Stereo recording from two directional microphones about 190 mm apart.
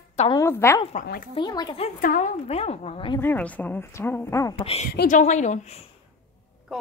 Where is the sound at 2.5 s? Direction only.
35° left (ahead or behind).